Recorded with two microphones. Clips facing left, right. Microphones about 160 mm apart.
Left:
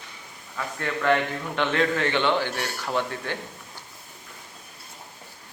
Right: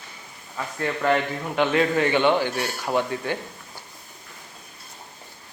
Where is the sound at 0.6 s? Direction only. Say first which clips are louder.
Right 2 dB; 15° right (ahead or behind).